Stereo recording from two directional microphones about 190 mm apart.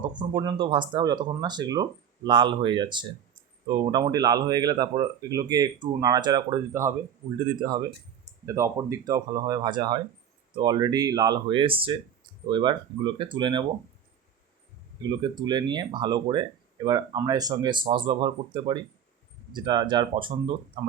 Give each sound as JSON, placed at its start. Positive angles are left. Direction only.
{"t": 0.2, "sound": "speech", "side_deg": -25}
{"t": 15.1, "sound": "speech", "side_deg": -20}